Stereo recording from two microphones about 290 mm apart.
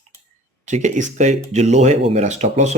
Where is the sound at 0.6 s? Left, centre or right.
Right.